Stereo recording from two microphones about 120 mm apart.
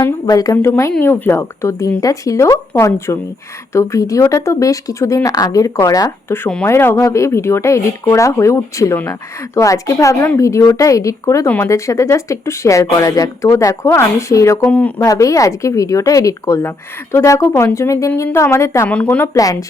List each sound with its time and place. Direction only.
0.0 s speech: 30° left (ahead or behind)
0.5 s speech: 20° left (ahead or behind)
11.4 s speech: 15° left (ahead or behind)
11.7 s speech: 25° left (ahead or behind)
14.7 s speech: 10° left (ahead or behind)
15.0 s speech: 30° left (ahead or behind)
18.9 s speech: 10° left (ahead or behind)
19.4 s speech: 30° left (ahead or behind)